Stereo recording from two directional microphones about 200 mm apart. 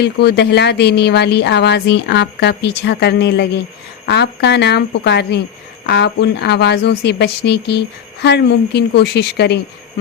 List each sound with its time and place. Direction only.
0.0 s speech: 55° left (ahead or behind)